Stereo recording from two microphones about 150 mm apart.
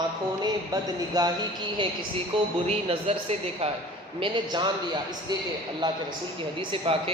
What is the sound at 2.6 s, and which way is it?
A man's voice, 45° right (ahead or behind).